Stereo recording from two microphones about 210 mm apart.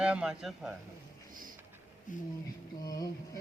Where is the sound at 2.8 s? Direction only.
15° left (ahead or behind).